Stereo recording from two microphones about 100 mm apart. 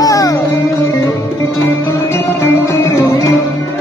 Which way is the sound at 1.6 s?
25° left (ahead or behind).